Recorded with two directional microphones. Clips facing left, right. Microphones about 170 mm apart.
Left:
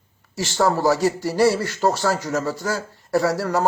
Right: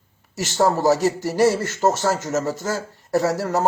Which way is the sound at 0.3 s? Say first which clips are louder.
Right 1 dB; 20° right (ahead or behind).